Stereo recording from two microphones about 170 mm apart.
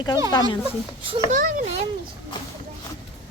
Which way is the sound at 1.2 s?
50° right (ahead or behind).